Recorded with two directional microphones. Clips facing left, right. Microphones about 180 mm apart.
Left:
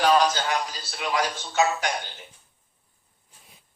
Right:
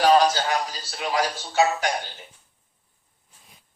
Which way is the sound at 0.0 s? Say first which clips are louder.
Right 3 dB; 35° right (ahead or behind).